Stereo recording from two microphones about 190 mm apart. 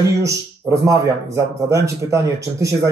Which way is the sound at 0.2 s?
15° right (ahead or behind).